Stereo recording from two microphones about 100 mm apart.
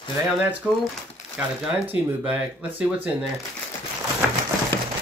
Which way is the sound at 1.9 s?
15° right (ahead or behind).